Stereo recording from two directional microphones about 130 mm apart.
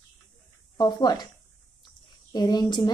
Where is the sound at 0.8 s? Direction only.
30° left (ahead or behind).